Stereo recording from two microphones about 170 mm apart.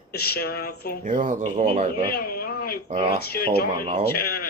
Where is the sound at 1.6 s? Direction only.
35° right (ahead or behind).